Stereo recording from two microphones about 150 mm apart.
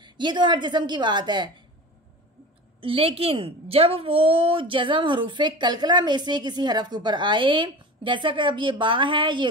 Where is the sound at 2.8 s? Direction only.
40° right (ahead or behind).